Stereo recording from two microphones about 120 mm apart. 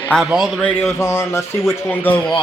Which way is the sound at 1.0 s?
20° left (ahead or behind).